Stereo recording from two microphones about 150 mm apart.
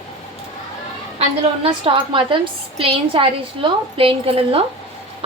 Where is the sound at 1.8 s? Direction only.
35° right (ahead or behind).